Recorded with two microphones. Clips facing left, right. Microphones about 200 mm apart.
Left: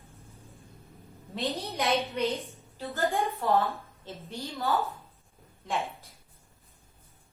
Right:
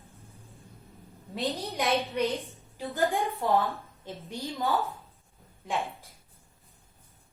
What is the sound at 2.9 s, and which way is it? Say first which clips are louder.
A woman's voice: right 1 dB; 15° right (ahead or behind).